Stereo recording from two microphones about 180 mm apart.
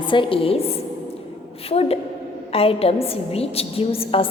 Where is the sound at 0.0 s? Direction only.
25° left (ahead or behind).